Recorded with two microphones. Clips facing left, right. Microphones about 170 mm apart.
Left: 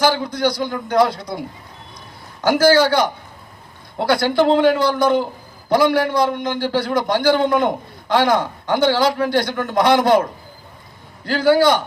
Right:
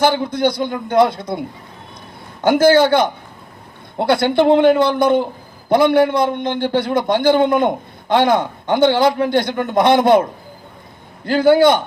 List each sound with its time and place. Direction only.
0.0 s a man's voice: 25° right (ahead or behind)
5.2 s a sound: 20° right (ahead or behind)
5.9 s a man's voice: 25° right (ahead or behind)
11.3 s a man's voice: 20° right (ahead or behind)